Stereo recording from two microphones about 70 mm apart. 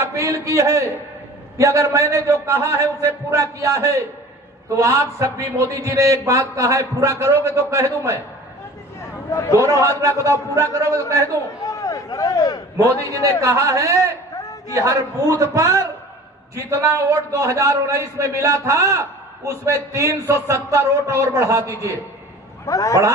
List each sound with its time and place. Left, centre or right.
0.0 s a man's voice: right
9.3 s a man's voice: left
10.0 s a man's voice: right
11.6 s a sound: left
12.7 s a man's voice: right
22.6 s a man's voice: left